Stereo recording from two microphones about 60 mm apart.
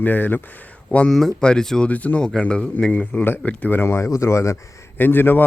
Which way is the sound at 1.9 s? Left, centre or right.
Left.